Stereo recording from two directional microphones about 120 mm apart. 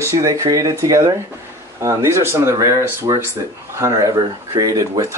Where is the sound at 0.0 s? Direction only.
25° right (ahead or behind).